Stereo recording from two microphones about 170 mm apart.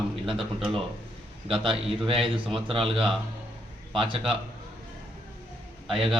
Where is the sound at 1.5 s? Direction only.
30° right (ahead or behind).